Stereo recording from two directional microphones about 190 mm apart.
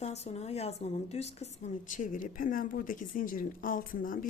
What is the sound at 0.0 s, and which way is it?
A woman's voice, 35° left (ahead or behind).